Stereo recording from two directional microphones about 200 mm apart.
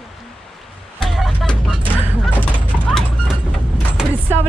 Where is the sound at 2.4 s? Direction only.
5° left (ahead or behind).